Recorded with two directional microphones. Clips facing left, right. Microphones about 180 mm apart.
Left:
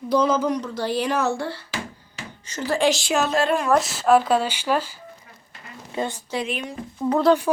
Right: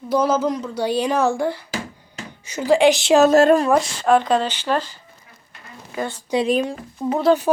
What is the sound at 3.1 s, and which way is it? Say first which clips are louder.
Speech: right 8 dB; 45° right (ahead or behind).